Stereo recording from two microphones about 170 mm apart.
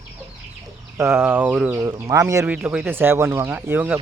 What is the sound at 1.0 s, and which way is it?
Speech, 15° right (ahead or behind).